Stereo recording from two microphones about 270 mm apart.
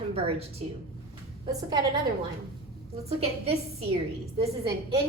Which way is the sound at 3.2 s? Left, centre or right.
Right.